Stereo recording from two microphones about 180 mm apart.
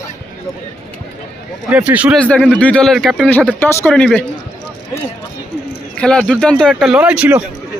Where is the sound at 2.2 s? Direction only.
5° left (ahead or behind).